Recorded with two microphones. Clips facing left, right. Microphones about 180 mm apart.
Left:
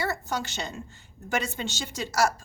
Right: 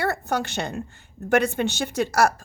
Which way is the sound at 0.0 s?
60° right (ahead or behind).